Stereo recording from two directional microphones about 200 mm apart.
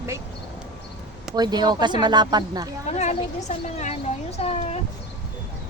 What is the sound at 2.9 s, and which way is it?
Speech, 35° left (ahead or behind).